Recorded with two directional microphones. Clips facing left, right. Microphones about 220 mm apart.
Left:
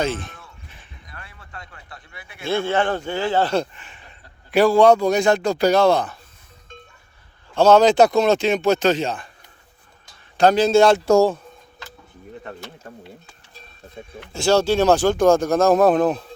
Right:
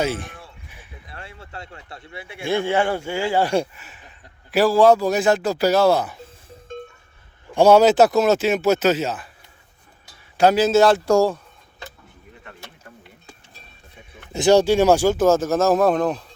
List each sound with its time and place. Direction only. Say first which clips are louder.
0.0 s speech: even; 10° right (ahead or behind)
1.0 s a sound: right 5 dB; 25° right (ahead or behind)
2.4 s speech: even; 15° right (ahead or behind)
7.5 s speech: right 1 dB; 10° right (ahead or behind)
10.3 s speech: left 1 dB; 5° right (ahead or behind)
11.0 s speech: left 2 dB; 25° left (ahead or behind)
12.4 s a sound: left 7 dB; 40° left (ahead or behind)
14.3 s speech: right 2 dB; 15° right (ahead or behind); by 16.2 s 5° left (ahead or behind)